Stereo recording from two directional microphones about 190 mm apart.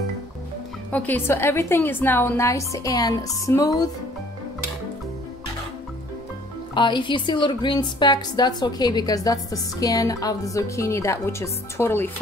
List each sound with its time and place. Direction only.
0.9 s a woman's voice: 10° left (ahead or behind)
6.7 s a woman's voice: 25° left (ahead or behind)